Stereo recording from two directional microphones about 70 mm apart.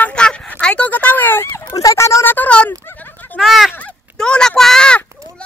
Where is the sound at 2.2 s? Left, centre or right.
Left.